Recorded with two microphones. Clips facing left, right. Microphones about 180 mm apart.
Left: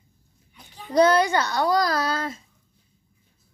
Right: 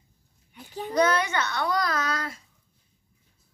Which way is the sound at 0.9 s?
35° left (ahead or behind).